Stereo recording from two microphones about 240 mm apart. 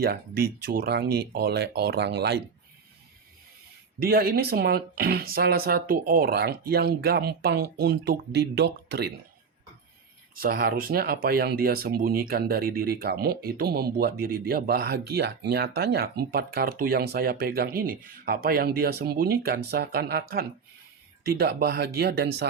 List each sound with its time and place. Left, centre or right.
0.0 s speech: right
4.0 s speech: right
10.3 s speech: right